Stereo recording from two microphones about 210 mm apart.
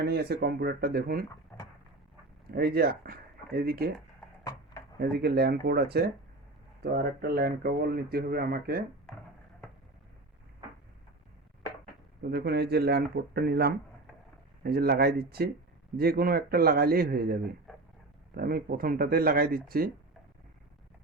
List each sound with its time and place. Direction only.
0.1 s speech: 50° right (ahead or behind)
1.5 s a sound: 10° left (ahead or behind)
2.5 s speech: 45° right (ahead or behind)
4.9 s speech: 50° right (ahead or behind)
12.3 s speech: 50° right (ahead or behind)